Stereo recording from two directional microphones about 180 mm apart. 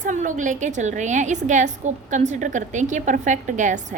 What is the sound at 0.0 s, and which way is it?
A woman's voice, 45° right (ahead or behind).